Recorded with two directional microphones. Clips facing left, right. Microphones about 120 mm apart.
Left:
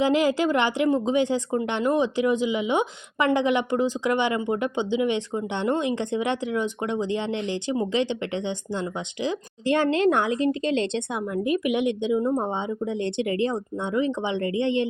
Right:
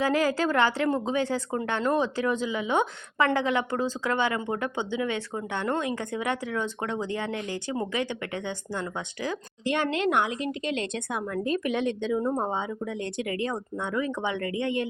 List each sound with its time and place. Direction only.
0.0 s speech: 20° left (ahead or behind)
9.6 s speech: 30° left (ahead or behind)